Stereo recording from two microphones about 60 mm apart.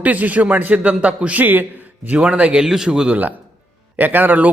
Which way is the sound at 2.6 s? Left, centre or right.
Centre.